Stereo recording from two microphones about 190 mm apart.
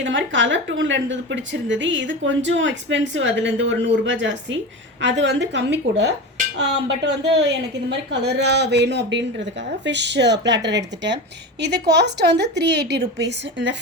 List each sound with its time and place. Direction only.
0.0 s a woman's voice: 75° right (ahead or behind)